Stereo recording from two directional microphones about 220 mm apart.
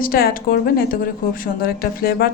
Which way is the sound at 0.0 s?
40° left (ahead or behind).